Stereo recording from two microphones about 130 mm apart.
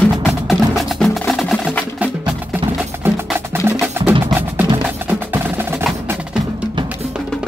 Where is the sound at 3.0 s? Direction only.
20° right (ahead or behind).